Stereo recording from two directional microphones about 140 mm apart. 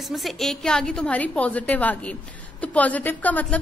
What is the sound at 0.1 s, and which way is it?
A woman's voice, centre (ahead or behind).